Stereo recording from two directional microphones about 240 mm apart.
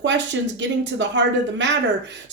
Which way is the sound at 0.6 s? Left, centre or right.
Right.